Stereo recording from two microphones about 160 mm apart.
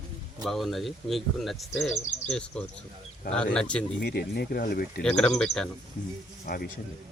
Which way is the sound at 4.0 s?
75° left (ahead or behind).